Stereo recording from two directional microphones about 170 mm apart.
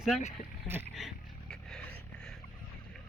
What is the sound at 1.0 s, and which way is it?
Vehicle, centre (ahead or behind).